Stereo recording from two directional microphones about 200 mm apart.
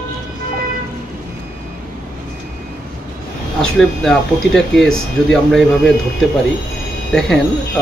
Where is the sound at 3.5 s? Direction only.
Centre (ahead or behind).